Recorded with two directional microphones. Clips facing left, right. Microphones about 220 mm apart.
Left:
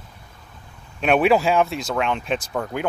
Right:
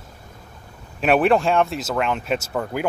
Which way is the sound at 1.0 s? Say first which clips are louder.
Even; centre (ahead or behind).